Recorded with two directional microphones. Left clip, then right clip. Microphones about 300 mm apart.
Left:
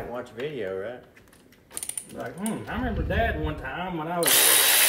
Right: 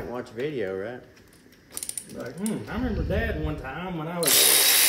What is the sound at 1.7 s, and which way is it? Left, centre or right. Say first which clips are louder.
Speech: left 1 dB; centre.